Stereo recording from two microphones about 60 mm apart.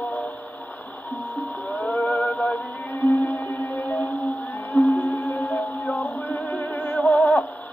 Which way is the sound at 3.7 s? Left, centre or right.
Left.